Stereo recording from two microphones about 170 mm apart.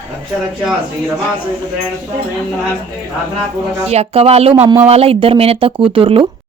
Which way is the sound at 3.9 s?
35° right (ahead or behind).